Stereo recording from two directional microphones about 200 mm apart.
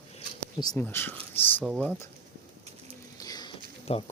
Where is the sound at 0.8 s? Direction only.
10° left (ahead or behind).